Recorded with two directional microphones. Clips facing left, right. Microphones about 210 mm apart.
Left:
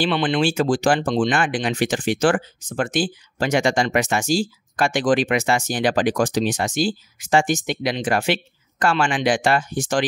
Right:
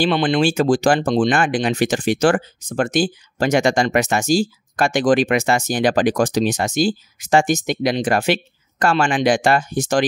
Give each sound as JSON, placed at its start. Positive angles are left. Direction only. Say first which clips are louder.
{"t": 0.0, "sound": "speech", "louder": "right 3 dB", "side_deg": -40}